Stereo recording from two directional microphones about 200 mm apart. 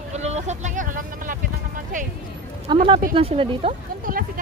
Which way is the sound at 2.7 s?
25° right (ahead or behind).